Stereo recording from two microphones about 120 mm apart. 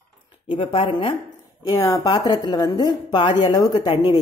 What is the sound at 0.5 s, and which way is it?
Speech, 50° left (ahead or behind).